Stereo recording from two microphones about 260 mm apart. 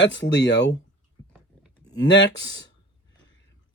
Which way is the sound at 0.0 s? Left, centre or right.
Left.